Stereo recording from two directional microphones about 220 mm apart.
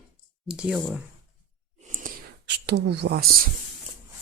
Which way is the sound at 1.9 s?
35° right (ahead or behind).